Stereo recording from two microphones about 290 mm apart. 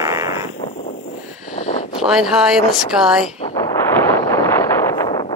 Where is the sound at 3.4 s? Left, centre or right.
Centre.